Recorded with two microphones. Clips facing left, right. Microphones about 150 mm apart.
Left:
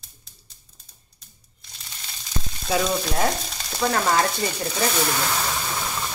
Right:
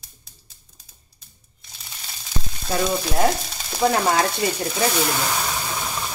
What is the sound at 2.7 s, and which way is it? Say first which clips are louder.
Speech: even; centre (ahead or behind).